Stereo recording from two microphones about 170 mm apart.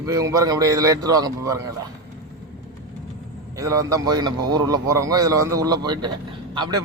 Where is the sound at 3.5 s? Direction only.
20° right (ahead or behind).